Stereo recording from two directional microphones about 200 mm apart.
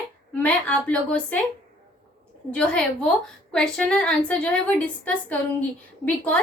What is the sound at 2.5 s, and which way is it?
A woman's voice, 5° left (ahead or behind).